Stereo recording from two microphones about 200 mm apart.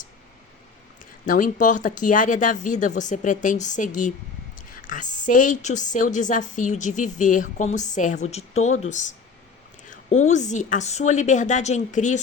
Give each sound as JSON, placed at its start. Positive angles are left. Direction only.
{"t": 1.3, "sound": "a woman's voice", "side_deg": 40}